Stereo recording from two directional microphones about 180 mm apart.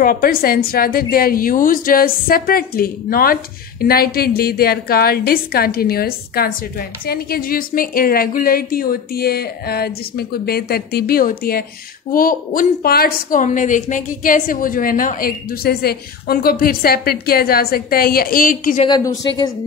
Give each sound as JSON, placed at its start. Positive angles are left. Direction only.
{"t": 0.0, "sound": "a woman's voice", "side_deg": 55}